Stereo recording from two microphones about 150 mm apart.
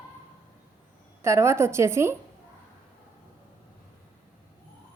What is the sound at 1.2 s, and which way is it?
A woman's voice, 20° right (ahead or behind).